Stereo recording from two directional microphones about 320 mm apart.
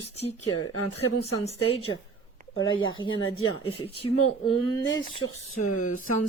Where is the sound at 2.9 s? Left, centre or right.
Centre.